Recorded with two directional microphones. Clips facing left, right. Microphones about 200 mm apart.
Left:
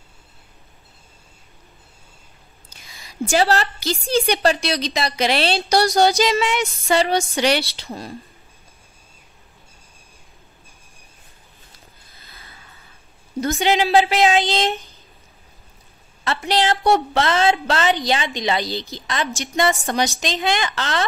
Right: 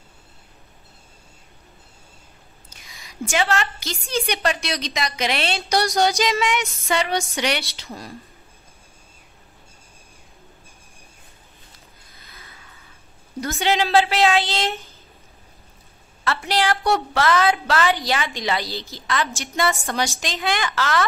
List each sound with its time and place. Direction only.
3.1 s a woman's voice: 35° left (ahead or behind)
12.2 s a sound: 30° left (ahead or behind)
13.4 s a woman's voice: 15° left (ahead or behind)
16.3 s a woman's voice: 20° left (ahead or behind)